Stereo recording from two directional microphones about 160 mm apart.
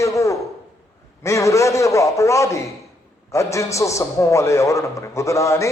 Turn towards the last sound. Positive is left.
turn(degrees=20)  # may be behind; listen again after turning